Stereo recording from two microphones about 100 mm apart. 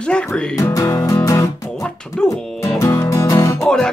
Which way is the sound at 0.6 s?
35° left (ahead or behind).